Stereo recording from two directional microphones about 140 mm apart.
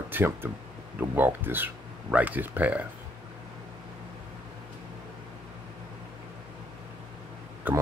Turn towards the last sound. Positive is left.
turn(degrees=-10)  # may be behind; listen again after turning